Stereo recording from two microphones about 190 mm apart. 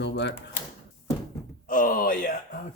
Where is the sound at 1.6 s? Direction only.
45° left (ahead or behind).